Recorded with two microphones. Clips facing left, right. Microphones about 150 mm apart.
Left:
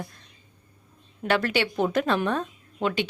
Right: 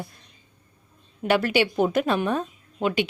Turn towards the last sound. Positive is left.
turn(degrees=-10)  # may be behind; listen again after turning